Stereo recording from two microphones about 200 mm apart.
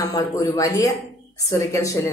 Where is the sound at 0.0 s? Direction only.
15° left (ahead or behind).